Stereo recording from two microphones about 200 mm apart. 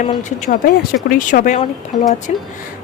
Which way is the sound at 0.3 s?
35° left (ahead or behind).